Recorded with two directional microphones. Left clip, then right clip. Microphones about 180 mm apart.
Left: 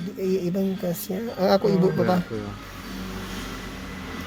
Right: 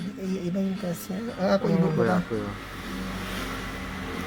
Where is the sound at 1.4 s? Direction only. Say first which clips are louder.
Left 4 dB; 55° left (ahead or behind).